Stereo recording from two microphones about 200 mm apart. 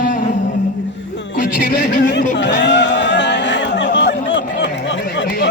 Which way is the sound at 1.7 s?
45° left (ahead or behind).